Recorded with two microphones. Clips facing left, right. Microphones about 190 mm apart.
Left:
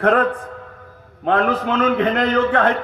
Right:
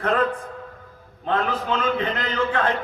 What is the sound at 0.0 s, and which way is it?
A man's voice, 60° left (ahead or behind).